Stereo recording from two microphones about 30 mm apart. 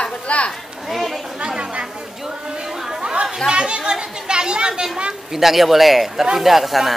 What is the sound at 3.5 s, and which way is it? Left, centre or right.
Speech, right.